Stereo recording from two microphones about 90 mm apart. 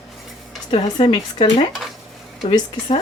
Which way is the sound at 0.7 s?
75° left (ahead or behind).